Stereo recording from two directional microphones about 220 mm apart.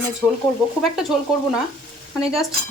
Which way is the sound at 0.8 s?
Centre (ahead or behind).